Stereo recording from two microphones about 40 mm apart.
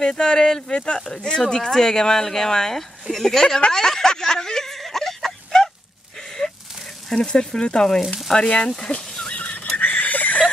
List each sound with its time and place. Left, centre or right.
0.0 s speech: centre
3.7 s a sound: centre
5.5 s fowl: centre
7.2 s speech: centre
8.3 s speech: centre
8.8 s speech: left
9.3 s a sound: left